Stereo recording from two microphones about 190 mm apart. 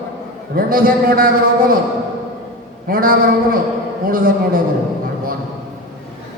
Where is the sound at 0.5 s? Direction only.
50° right (ahead or behind).